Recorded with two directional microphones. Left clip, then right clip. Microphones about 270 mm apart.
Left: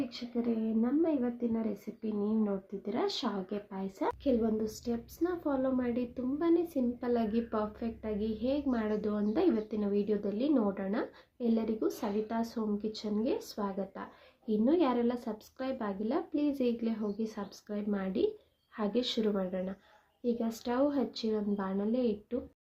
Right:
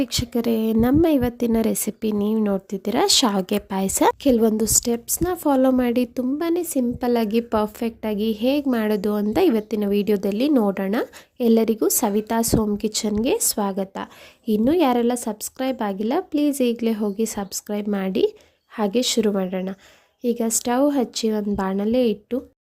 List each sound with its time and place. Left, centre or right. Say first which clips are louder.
0.0 s a woman's voice: right 13 dB; right